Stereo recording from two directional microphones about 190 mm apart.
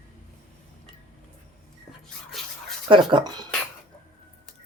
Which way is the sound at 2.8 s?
25° right (ahead or behind).